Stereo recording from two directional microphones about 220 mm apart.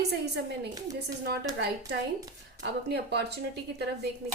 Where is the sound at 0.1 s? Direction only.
50° right (ahead or behind).